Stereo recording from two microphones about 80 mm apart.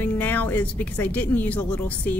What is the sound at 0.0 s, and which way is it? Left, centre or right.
A woman's voice, left.